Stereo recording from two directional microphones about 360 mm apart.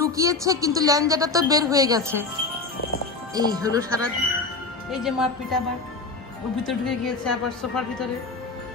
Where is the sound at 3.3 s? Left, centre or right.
Centre.